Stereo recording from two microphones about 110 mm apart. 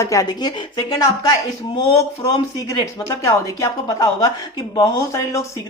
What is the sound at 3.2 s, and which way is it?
Speech, 30° left (ahead or behind).